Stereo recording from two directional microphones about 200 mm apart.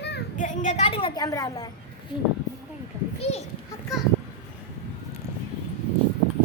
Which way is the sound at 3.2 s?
30° left (ahead or behind).